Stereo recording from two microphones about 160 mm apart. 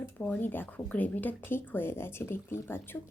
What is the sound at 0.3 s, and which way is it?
Speech, 10° left (ahead or behind).